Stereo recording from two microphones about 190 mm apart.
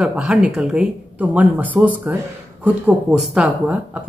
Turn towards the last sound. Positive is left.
turn(degrees=-5)  # may be behind; listen again after turning